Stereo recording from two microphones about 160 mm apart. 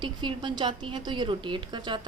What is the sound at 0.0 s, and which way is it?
A woman's voice, 30° right (ahead or behind).